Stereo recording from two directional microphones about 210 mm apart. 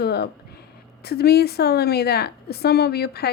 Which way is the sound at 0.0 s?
50° left (ahead or behind).